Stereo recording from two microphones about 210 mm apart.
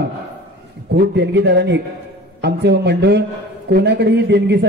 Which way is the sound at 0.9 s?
55° right (ahead or behind).